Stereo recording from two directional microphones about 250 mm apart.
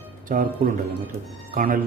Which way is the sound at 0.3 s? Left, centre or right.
Right.